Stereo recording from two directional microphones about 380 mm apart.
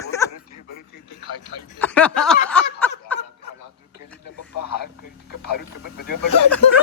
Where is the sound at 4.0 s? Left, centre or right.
Left.